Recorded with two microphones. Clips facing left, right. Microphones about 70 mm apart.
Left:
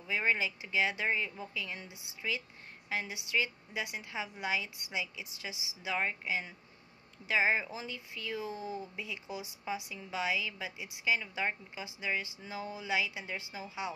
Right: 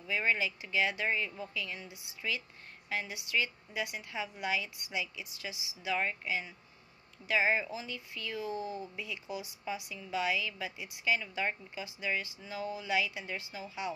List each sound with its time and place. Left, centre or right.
0.0 s speech: left